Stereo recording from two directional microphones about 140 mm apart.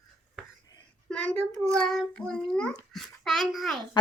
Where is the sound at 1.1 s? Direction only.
5° left (ahead or behind).